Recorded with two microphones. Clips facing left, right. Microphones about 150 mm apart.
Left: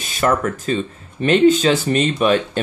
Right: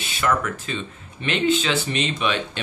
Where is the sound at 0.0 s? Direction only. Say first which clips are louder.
Left 5 dB; 45° left (ahead or behind).